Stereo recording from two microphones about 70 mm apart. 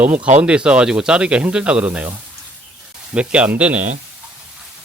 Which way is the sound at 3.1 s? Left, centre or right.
Centre.